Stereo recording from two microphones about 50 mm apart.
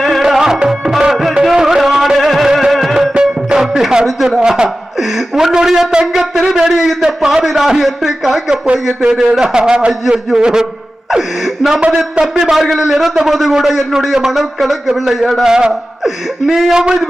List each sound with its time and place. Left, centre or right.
0.0 s music: centre
4.9 s a sound: centre
6.1 s shofar: centre
6.6 s a sound: centre
9.1 s a man's voice: centre
12.2 s a man's voice: centre
15.4 s a man's voice: centre
16.7 s a man's voice: centre